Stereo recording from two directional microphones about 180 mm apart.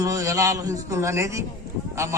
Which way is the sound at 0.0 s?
20° right (ahead or behind).